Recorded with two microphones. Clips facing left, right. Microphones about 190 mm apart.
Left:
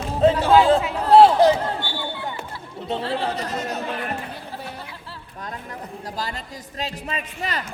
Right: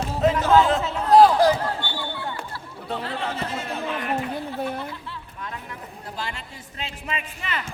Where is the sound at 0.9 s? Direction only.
30° left (ahead or behind).